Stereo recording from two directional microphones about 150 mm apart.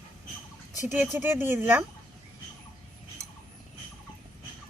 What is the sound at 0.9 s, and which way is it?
Speech, 15° right (ahead or behind).